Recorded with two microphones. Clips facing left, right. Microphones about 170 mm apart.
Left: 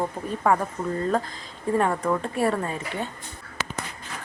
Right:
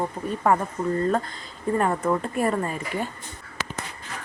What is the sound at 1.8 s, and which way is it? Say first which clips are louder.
A woman's voice: even; 5° right (ahead or behind).